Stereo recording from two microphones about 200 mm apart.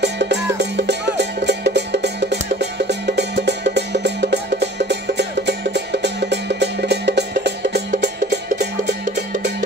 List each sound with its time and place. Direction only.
0.0 s music: 60° right (ahead or behind)